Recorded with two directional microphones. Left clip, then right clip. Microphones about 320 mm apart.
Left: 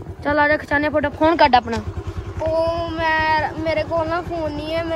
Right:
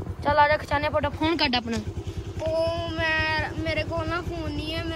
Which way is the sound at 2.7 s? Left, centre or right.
Centre.